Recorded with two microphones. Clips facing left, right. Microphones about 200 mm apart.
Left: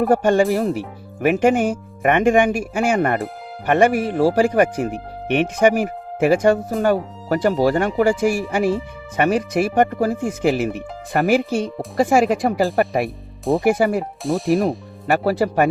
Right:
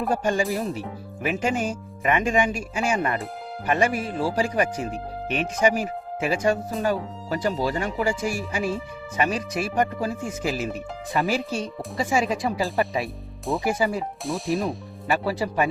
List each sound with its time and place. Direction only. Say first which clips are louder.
0.1 s speech: left 6 dB; 60° left (ahead or behind)
13.4 s speech: left 7 dB; centre (ahead or behind)
13.7 s speech: left 7 dB; 60° left (ahead or behind)
14.3 s speech: left 8 dB; centre (ahead or behind)
15.0 s speech: left 7 dB; 65° left (ahead or behind)